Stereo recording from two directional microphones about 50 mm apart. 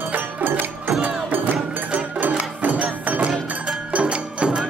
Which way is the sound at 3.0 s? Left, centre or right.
Right.